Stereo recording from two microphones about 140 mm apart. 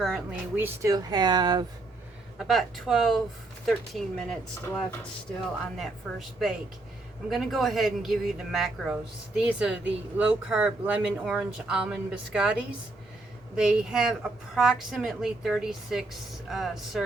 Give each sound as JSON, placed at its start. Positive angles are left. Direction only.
{"t": 0.0, "sound": "speech", "side_deg": 0}
{"t": 0.5, "sound": "speech", "side_deg": -15}
{"t": 2.4, "sound": "speech", "side_deg": 0}
{"t": 5.7, "sound": "speech", "side_deg": 0}
{"t": 13.6, "sound": "speech", "side_deg": -5}